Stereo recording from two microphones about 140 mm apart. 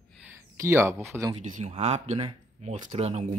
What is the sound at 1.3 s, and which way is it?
Speech, 55° right (ahead or behind).